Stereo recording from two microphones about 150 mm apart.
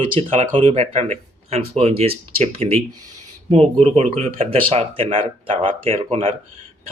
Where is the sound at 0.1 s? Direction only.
40° right (ahead or behind).